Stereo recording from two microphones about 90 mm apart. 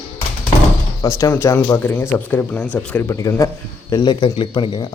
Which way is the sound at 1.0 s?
35° left (ahead or behind).